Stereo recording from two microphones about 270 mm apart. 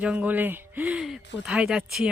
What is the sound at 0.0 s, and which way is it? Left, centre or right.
Speech, centre.